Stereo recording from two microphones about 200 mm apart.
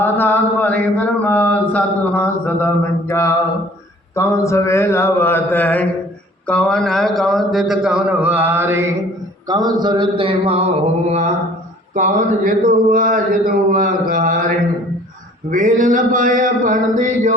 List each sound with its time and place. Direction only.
0.0 s mantra: 10° left (ahead or behind)
6.5 s a man's voice: 5° left (ahead or behind); by 10.6 s 30° right (ahead or behind)
11.9 s speech: 40° right (ahead or behind)